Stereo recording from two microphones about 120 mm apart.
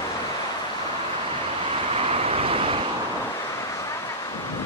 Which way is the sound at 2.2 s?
55° right (ahead or behind).